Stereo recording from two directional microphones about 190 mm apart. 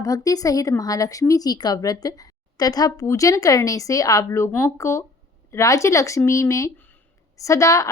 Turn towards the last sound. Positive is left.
turn(degrees=15)  # may be behind; listen again after turning